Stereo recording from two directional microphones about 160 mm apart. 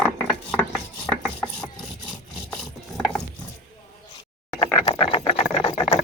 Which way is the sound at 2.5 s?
5° left (ahead or behind).